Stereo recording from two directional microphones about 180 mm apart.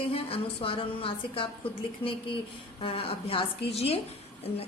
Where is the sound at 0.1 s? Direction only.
30° left (ahead or behind).